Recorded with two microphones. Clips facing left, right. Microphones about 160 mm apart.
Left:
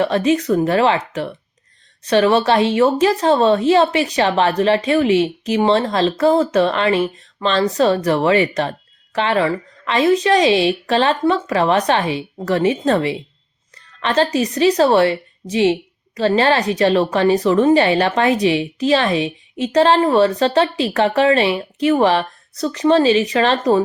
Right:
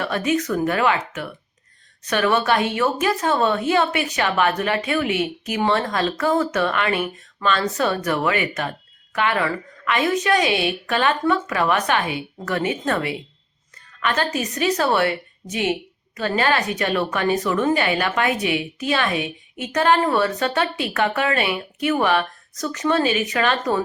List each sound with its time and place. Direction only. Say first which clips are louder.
0.0 s a woman's voice: left 6 dB; 25° left (ahead or behind)